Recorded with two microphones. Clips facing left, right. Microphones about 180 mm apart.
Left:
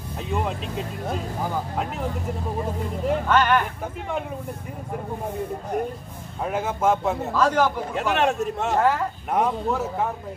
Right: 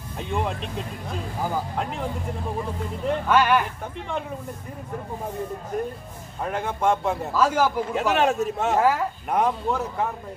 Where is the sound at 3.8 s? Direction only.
5° left (ahead or behind).